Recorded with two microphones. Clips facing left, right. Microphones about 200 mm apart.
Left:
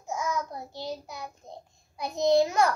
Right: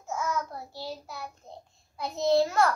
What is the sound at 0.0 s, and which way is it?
Child singing, 15° left (ahead or behind).